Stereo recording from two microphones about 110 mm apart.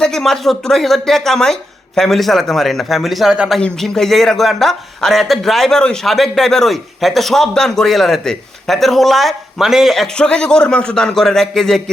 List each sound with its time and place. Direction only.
0.0 s a man's voice: 5° left (ahead or behind)
3.6 s a man's voice: 5° left (ahead or behind)